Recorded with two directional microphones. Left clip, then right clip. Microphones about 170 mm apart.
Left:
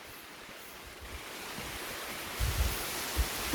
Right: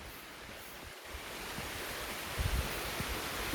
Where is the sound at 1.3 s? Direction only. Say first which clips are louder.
Left 1 dB; 70° left (ahead or behind).